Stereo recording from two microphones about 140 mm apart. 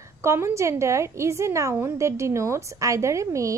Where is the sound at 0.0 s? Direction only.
20° right (ahead or behind).